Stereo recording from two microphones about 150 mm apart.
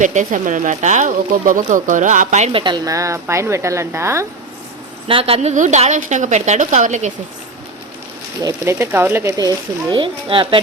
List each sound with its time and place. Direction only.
0.0 s speech: 55° right (ahead or behind)
2.5 s speech: 35° right (ahead or behind)
5.0 s a woman's voice: 40° right (ahead or behind)
8.4 s speech: 20° right (ahead or behind)